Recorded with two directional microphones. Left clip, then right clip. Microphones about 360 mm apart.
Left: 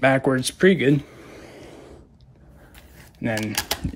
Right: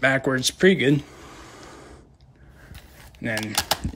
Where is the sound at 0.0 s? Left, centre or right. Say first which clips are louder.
Left 2 dB; centre.